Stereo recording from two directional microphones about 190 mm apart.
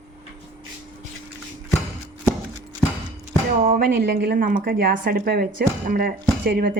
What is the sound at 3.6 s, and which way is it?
A woman's voice, 50° right (ahead or behind).